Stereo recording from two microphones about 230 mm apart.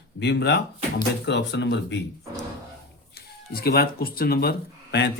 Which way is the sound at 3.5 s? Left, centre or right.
Left.